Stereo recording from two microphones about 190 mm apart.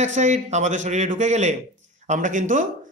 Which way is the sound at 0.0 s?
40° right (ahead or behind).